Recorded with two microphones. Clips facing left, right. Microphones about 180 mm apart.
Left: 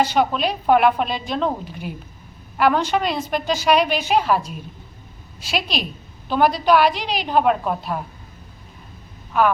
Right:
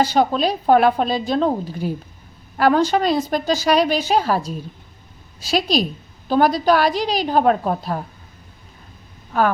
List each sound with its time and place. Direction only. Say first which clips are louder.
0.0 s a woman's voice: right 2 dB; 35° right (ahead or behind)